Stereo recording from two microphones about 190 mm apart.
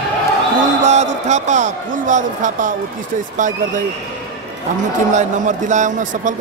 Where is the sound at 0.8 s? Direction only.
35° right (ahead or behind).